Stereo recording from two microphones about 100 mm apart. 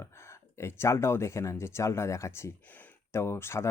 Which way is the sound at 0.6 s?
25° left (ahead or behind).